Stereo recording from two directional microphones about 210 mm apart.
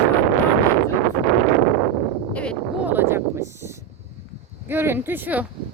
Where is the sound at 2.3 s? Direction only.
5° left (ahead or behind).